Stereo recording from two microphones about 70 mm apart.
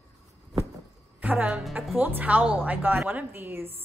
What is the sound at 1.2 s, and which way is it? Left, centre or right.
A woman's voice, right.